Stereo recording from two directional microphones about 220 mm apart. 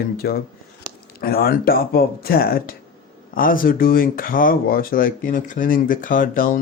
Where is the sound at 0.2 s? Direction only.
45° left (ahead or behind).